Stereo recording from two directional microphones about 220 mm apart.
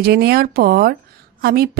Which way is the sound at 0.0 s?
45° right (ahead or behind).